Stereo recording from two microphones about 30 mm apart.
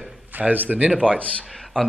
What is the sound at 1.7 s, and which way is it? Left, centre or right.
Speech, left.